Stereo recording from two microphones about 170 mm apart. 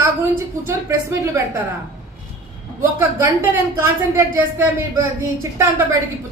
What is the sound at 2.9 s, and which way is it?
Speech, 15° right (ahead or behind).